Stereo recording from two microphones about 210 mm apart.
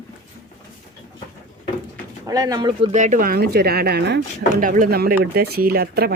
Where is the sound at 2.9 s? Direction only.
35° right (ahead or behind); by 4.2 s 50° right (ahead or behind).